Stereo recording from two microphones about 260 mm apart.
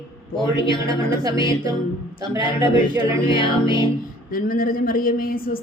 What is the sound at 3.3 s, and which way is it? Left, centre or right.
Music, centre.